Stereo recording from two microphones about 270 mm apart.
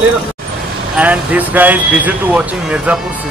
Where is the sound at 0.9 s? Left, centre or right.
Centre.